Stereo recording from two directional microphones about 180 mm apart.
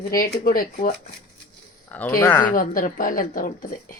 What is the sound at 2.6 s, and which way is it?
Speech, 50° left (ahead or behind).